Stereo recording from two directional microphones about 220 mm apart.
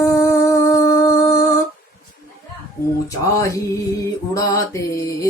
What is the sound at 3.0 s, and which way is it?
Music, 15° left (ahead or behind).